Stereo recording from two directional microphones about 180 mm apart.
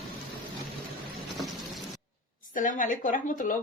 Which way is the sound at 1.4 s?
Centre (ahead or behind).